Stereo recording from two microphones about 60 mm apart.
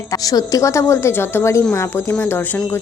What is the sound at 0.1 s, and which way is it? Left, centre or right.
A woman's voice, left.